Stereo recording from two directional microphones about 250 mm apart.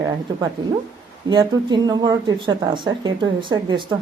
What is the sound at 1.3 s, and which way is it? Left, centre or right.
A woman's voice, centre.